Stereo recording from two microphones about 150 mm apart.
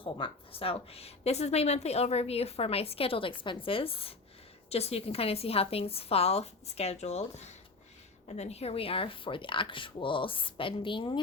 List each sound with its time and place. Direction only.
0.0 s a woman's voice: 35° left (ahead or behind)